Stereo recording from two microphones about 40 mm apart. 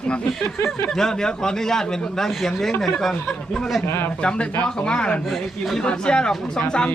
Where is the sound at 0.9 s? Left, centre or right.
Centre.